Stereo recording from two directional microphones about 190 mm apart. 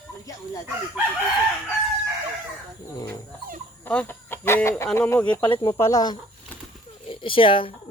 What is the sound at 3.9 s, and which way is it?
Speech, 10° left (ahead or behind).